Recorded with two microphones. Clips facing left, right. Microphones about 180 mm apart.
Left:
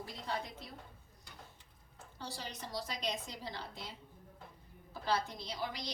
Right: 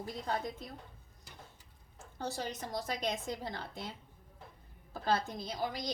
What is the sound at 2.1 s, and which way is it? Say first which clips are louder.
A woman's voice: right 7 dB; 50° right (ahead or behind).